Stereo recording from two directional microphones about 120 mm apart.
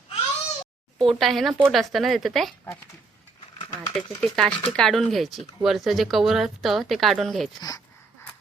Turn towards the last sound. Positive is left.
turn(degrees=0)  # may be behind; listen again after turning